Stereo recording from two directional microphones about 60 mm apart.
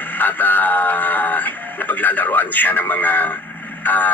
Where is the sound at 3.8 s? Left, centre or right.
Left.